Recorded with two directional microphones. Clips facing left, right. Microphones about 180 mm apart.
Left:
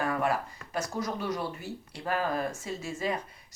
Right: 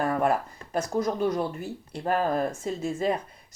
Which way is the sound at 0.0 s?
45° right (ahead or behind).